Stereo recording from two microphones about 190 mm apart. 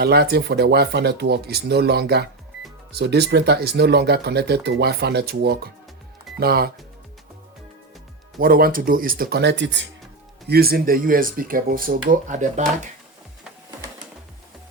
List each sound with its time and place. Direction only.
0.0 s speech: 55° right (ahead or behind)
8.4 s speech: 50° right (ahead or behind); by 9.8 s 70° right (ahead or behind)
10.4 s speech: 55° right (ahead or behind)